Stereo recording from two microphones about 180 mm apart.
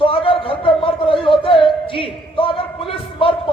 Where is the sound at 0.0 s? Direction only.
30° left (ahead or behind).